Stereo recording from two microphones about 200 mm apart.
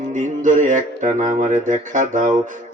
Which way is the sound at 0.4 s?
40° right (ahead or behind).